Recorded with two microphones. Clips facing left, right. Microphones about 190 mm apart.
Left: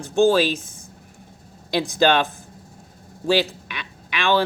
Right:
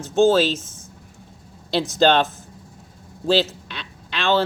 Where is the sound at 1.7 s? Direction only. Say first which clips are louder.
Right 1 dB; 15° left (ahead or behind).